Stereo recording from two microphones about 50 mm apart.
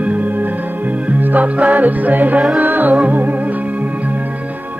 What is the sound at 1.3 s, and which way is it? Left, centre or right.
Music, right.